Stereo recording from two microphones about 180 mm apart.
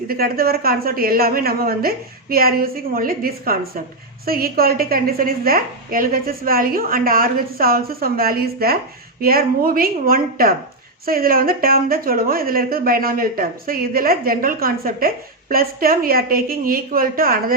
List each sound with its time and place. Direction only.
0.1 s a woman's voice: 55° right (ahead or behind)